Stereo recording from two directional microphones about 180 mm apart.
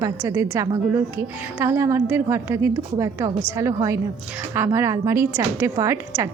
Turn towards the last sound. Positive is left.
turn(degrees=-15)  # may be behind; listen again after turning